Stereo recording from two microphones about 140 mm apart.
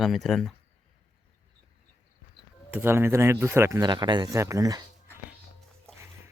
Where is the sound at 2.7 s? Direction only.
15° right (ahead or behind).